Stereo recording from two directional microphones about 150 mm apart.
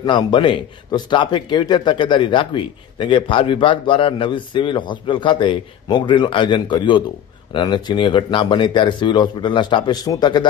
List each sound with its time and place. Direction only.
0.0 s a man's voice: 30° left (ahead or behind)